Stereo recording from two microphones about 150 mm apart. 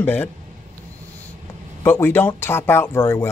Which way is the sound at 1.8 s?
15° left (ahead or behind).